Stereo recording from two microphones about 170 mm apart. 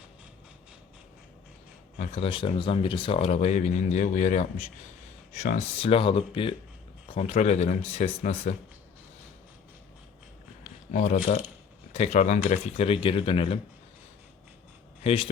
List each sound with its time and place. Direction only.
2.1 s speech: 30° left (ahead or behind)
10.9 s speech: 45° left (ahead or behind)
15.0 s speech: 30° left (ahead or behind)